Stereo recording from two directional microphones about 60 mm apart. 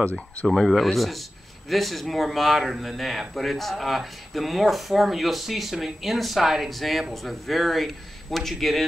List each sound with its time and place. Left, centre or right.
0.0 s speech: left
0.5 s speech: centre